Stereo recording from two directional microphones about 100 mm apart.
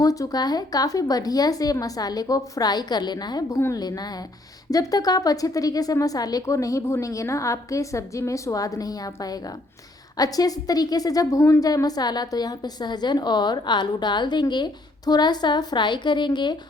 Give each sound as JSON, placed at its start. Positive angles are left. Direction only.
{"t": 0.0, "sound": "a woman's voice", "side_deg": 35}